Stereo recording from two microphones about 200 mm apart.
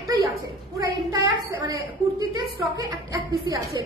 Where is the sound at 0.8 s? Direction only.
20° right (ahead or behind).